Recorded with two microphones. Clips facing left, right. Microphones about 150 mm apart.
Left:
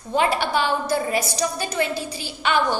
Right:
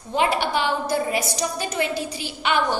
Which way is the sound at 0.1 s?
15° right (ahead or behind).